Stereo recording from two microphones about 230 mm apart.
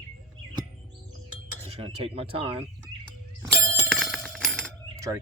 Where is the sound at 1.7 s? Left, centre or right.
Right.